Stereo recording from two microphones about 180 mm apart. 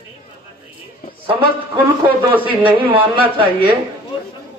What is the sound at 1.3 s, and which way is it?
A woman's voice, 30° right (ahead or behind).